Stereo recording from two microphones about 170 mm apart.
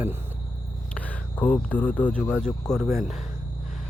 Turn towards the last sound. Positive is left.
turn(degrees=0)  # may be behind; listen again after turning